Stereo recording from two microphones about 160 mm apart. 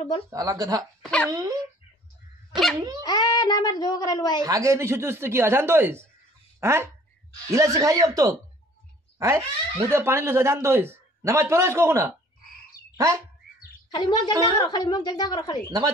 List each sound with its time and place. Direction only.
0.3 s a man's voice: 20° right (ahead or behind)
2.5 s dog: centre (ahead or behind)
3.0 s speech: 25° left (ahead or behind)
4.5 s a man's voice: 20° right (ahead or behind)
13.8 s a child's voice: 30° left (ahead or behind)